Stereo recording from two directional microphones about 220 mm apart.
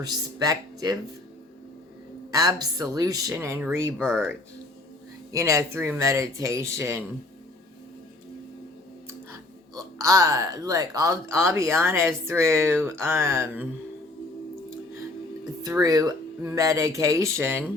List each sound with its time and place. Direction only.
0.0 s speech: 15° right (ahead or behind)
2.3 s speech: 15° right (ahead or behind)
3.9 s speech: centre (ahead or behind)
5.3 s speech: 15° right (ahead or behind)
9.7 s speech: 15° right (ahead or behind)
15.6 s speech: 15° right (ahead or behind)